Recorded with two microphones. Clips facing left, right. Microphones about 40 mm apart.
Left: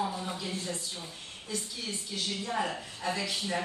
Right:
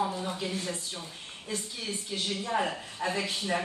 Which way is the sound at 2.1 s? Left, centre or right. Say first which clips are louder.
Right 3 dB; right.